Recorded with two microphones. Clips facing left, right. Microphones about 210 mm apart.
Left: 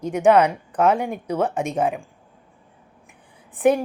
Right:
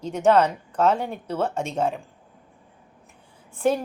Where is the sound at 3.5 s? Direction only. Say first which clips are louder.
Left 4 dB; 15° left (ahead or behind).